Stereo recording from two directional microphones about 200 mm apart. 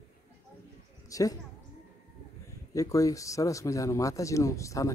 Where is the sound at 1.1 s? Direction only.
15° left (ahead or behind).